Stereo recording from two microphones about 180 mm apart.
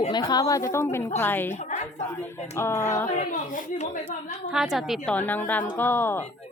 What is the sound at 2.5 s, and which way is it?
Speech, 15° left (ahead or behind).